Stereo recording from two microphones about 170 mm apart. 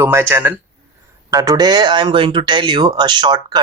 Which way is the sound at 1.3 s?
20° right (ahead or behind).